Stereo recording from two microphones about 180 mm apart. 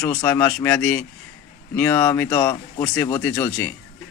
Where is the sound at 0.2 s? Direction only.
10° left (ahead or behind).